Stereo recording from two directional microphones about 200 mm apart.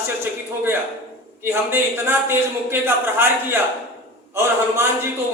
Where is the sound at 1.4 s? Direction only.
10° right (ahead or behind).